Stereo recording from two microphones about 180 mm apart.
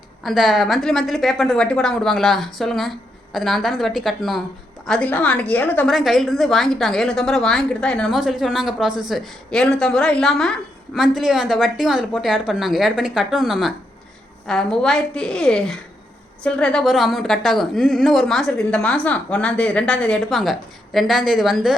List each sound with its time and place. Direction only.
0.2 s a woman's voice: centre (ahead or behind)